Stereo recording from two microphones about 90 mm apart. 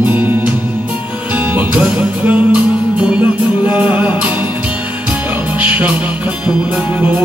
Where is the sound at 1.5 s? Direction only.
20° right (ahead or behind).